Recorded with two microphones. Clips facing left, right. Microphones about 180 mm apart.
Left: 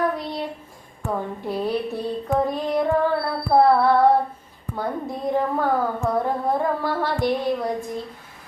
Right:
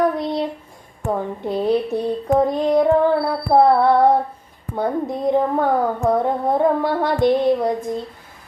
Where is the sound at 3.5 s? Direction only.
20° right (ahead or behind).